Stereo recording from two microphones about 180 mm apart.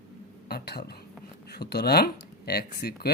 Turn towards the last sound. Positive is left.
turn(degrees=60)  # may be behind; listen again after turning